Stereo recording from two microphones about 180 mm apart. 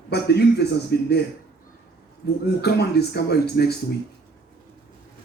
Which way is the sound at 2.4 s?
65° left (ahead or behind).